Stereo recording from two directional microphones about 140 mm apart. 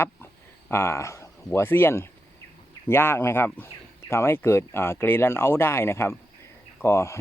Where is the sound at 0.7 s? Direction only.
20° left (ahead or behind).